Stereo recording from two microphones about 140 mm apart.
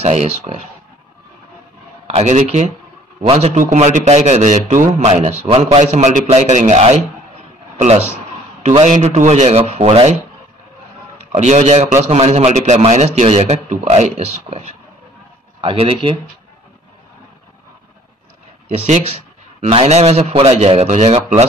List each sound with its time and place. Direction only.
0.0 s a man's voice: 50° right (ahead or behind)
2.0 s a man's voice: 55° right (ahead or behind)
3.2 s a man's voice: 45° right (ahead or behind)
8.8 s a man's voice: 55° right (ahead or behind)
11.3 s a man's voice: 55° right (ahead or behind)
15.6 s speech: 35° right (ahead or behind)
18.7 s a man's voice: 55° right (ahead or behind)